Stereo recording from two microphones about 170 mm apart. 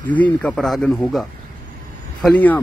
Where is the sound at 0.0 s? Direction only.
10° left (ahead or behind).